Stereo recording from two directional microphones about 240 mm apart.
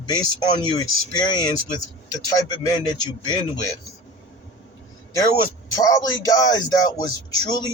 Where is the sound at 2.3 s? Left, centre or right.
Centre.